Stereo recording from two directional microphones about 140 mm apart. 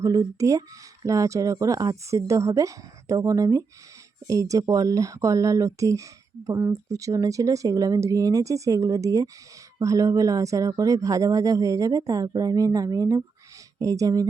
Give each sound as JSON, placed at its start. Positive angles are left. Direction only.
{"t": 0.0, "sound": "speech", "side_deg": -25}